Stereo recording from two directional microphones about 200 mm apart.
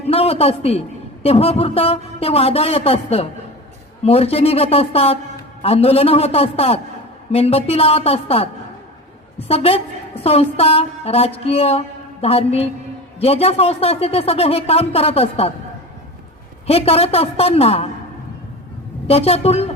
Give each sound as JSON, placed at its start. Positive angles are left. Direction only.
{"t": 0.1, "sound": "a man's voice", "side_deg": 30}
{"t": 16.6, "sound": "a man's voice", "side_deg": 30}
{"t": 19.0, "sound": "speech", "side_deg": 30}